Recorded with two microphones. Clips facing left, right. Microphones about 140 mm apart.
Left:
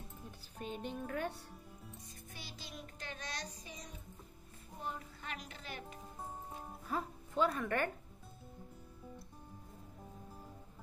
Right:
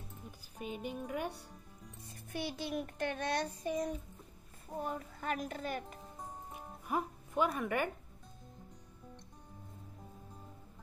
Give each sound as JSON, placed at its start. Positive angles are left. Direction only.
{"t": 0.6, "sound": "speech", "side_deg": -10}
{"t": 2.0, "sound": "music", "side_deg": -60}
{"t": 4.6, "sound": "a woman's voice", "side_deg": -45}
{"t": 6.9, "sound": "a woman's voice", "side_deg": -15}